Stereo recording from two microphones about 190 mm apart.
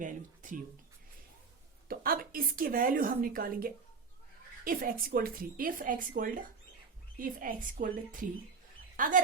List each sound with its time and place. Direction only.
0.0 s speech: 45° right (ahead or behind)
1.9 s a woman's voice: 50° right (ahead or behind)